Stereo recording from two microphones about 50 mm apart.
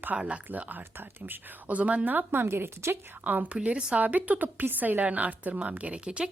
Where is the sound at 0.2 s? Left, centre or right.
Right.